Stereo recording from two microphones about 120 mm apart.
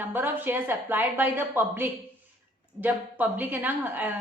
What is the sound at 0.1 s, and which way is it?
Speech, 15° right (ahead or behind).